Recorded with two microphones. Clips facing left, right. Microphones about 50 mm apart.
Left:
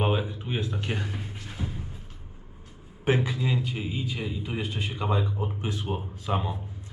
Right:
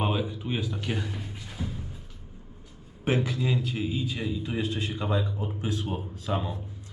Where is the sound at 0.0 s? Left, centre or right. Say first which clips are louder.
Left 1 dB; left.